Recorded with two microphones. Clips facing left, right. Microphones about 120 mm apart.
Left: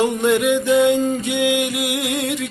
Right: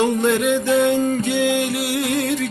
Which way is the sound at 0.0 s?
15° left (ahead or behind).